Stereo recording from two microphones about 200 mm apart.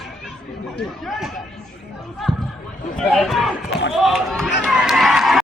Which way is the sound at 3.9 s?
Centre (ahead or behind).